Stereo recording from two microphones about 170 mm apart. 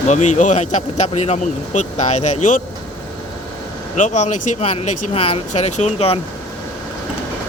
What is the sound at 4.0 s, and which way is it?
Speech, 45° left (ahead or behind).